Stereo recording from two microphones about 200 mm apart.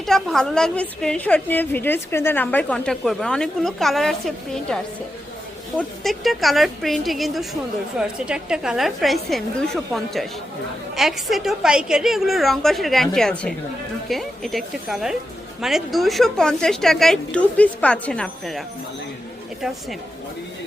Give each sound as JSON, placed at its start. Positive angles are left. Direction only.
{"t": 0.0, "sound": "a woman's voice", "side_deg": 0}